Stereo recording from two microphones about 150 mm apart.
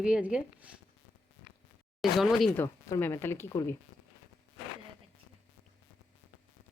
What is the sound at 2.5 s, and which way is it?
Speech, 15° left (ahead or behind).